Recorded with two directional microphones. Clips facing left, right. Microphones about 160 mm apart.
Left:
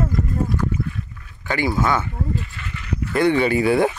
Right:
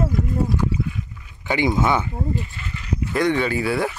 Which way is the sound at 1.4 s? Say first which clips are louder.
Right 1 dB; 20° right (ahead or behind).